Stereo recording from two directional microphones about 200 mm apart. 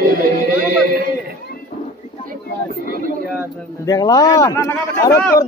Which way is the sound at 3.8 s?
20° left (ahead or behind).